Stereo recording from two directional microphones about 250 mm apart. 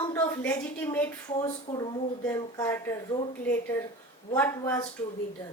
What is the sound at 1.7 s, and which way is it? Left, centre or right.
Speech, left.